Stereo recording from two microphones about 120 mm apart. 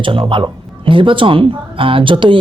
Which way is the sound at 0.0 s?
45° right (ahead or behind).